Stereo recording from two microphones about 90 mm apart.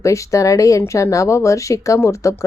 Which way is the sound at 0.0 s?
35° left (ahead or behind).